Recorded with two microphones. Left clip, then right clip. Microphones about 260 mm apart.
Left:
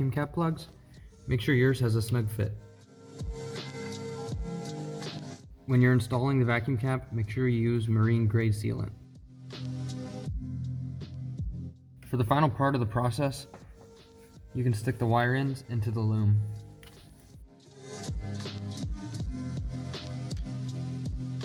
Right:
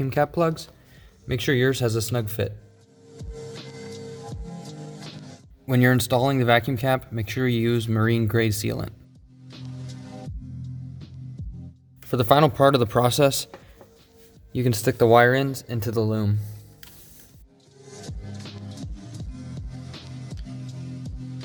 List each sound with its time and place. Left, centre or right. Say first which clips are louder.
0.0 s speech: right 10 dB; right
3.2 s music: right 1 dB; centre
4.7 s music: left 2 dB; centre
5.6 s speech: right 7 dB; right
9.5 s music: left 1 dB; centre
12.1 s speech: right 9 dB; right
14.5 s speech: right 10 dB; right
18.1 s music: even; centre